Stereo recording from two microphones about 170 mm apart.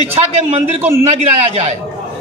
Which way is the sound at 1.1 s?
40° right (ahead or behind).